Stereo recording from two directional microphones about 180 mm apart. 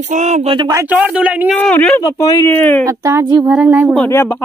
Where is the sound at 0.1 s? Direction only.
40° right (ahead or behind).